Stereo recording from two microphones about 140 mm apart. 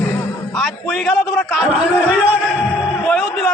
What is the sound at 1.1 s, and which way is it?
Speech, centre (ahead or behind).